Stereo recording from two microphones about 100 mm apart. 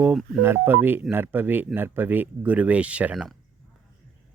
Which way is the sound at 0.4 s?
20° right (ahead or behind).